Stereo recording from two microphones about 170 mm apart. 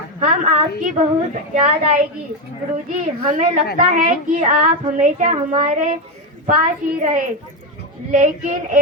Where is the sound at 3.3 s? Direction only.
45° right (ahead or behind).